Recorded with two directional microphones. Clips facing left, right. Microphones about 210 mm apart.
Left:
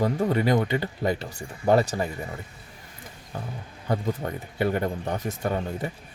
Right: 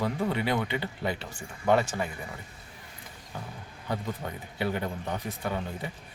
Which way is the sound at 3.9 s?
50° left (ahead or behind).